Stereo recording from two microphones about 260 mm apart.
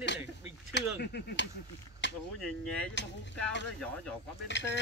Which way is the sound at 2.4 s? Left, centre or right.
Centre.